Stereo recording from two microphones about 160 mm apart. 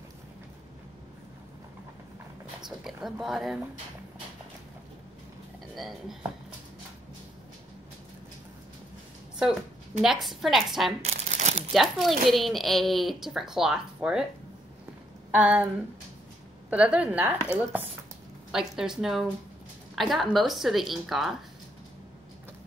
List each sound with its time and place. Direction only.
2.6 s speech: centre (ahead or behind)
5.8 s speech: centre (ahead or behind)
10.0 s speech: centre (ahead or behind)
11.0 s crumpling: 45° right (ahead or behind)
11.7 s speech: centre (ahead or behind)
15.3 s a woman's voice: 10° right (ahead or behind)
16.7 s a woman's voice: 10° right (ahead or behind)
18.5 s speech: 5° right (ahead or behind)